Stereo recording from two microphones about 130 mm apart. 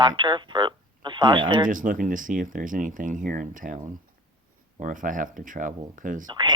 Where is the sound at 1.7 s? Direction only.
90° right.